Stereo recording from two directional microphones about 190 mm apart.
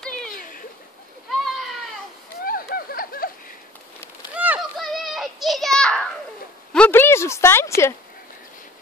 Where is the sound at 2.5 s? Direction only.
50° left (ahead or behind).